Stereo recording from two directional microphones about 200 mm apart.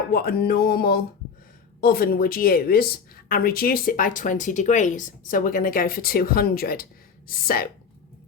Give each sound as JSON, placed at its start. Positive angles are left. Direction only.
{"t": 0.1, "sound": "speech", "side_deg": 50}